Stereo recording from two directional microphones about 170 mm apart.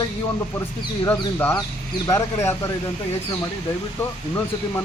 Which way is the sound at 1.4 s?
15° left (ahead or behind).